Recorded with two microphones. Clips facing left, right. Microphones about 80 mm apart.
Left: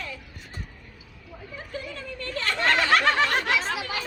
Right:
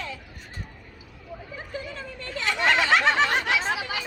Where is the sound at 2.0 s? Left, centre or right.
Centre.